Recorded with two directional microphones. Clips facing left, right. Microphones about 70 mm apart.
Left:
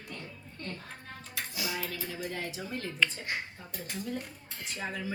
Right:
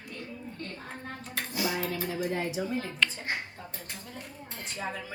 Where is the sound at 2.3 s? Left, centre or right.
Right.